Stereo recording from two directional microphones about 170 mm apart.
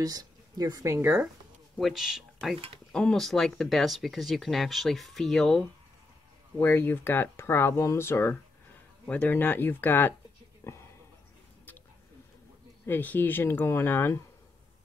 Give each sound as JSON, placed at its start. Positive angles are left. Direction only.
{"t": 0.0, "sound": "speech", "side_deg": -20}
{"t": 1.8, "sound": "speech", "side_deg": 0}
{"t": 6.6, "sound": "speech", "side_deg": 10}
{"t": 10.6, "sound": "a sound", "side_deg": 15}
{"t": 12.8, "sound": "speech", "side_deg": 10}